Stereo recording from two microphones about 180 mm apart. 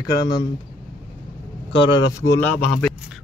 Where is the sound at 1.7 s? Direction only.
25° left (ahead or behind).